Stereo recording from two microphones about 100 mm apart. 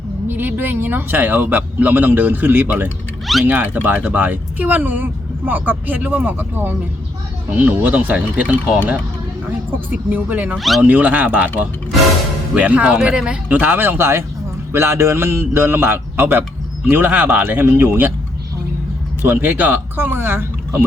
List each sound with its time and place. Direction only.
0.3 s speech: 20° right (ahead or behind)
12.5 s speech: 15° right (ahead or behind)
19.2 s speech: 20° right (ahead or behind)